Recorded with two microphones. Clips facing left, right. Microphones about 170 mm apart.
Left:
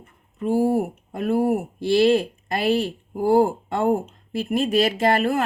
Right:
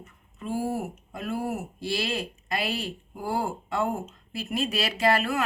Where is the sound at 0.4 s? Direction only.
55° left (ahead or behind).